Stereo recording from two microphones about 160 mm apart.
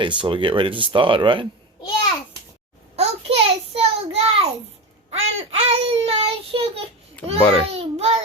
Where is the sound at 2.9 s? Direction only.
40° right (ahead or behind).